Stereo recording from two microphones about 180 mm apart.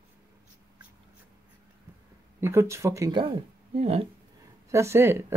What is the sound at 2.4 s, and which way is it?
Speech, 15° right (ahead or behind).